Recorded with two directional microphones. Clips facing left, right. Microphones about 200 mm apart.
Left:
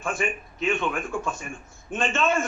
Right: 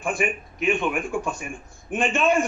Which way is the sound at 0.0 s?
15° right (ahead or behind).